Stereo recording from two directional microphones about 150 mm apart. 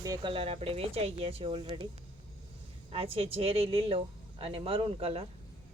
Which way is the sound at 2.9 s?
40° right (ahead or behind).